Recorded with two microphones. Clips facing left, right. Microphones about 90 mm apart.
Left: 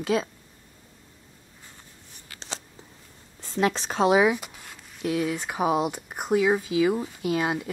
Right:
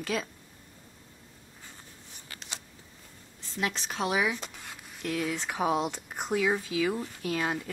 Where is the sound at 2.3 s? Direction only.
30° left (ahead or behind).